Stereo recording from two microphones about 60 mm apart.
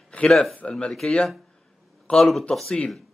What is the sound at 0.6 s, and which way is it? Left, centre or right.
Speech, centre.